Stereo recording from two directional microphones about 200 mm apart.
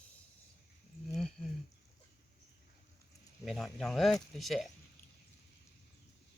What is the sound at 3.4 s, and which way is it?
Speech, centre (ahead or behind).